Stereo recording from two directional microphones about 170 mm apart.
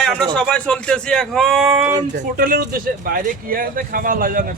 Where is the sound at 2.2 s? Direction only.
60° right (ahead or behind).